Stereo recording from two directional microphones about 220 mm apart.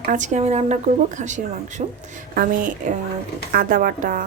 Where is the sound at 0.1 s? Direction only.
35° right (ahead or behind).